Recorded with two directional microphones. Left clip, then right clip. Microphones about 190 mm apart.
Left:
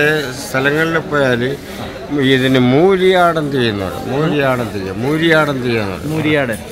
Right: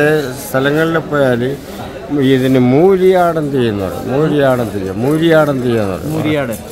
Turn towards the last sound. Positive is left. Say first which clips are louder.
# left 1 dB
turn(degrees=0)  # may be behind; listen again after turning